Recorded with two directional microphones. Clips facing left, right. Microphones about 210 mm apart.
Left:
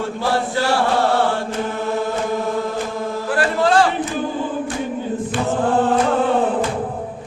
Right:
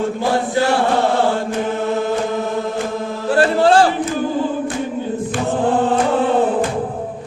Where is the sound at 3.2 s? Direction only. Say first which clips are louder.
Right 5 dB; 30° right (ahead or behind).